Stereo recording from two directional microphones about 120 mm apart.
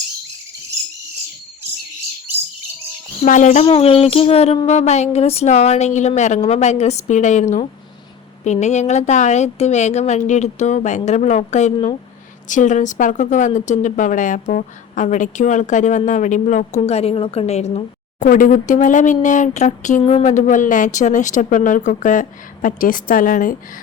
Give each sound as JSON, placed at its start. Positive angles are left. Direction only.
{"t": 3.2, "sound": "speech", "side_deg": 90}
{"t": 8.4, "sound": "speech", "side_deg": 75}
{"t": 12.5, "sound": "a woman's voice", "side_deg": 90}